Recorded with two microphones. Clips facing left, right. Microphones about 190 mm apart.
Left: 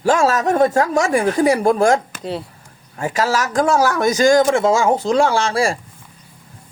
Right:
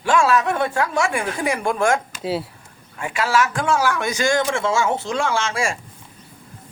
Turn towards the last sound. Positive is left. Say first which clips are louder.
# left 5 dB
turn(degrees=35)  # may be behind; listen again after turning